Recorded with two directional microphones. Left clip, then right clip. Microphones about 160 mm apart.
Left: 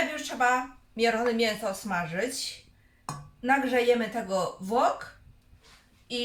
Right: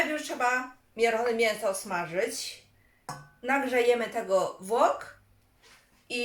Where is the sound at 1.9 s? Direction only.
20° right (ahead or behind).